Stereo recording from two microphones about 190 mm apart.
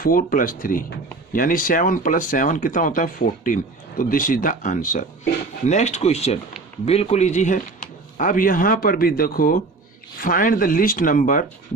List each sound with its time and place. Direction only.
0.0 s speech: 50° left (ahead or behind)